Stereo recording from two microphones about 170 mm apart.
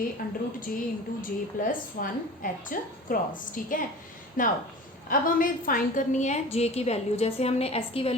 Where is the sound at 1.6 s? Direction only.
55° left (ahead or behind).